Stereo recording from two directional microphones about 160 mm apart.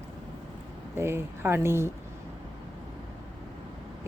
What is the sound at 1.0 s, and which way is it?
Speech, 15° right (ahead or behind).